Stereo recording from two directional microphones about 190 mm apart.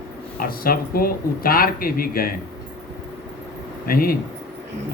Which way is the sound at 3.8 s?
50° left (ahead or behind).